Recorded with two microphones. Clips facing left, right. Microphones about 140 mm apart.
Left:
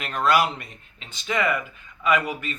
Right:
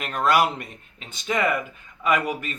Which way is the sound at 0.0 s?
45° right (ahead or behind).